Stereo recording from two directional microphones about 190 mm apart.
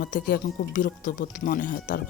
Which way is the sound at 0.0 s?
55° left (ahead or behind).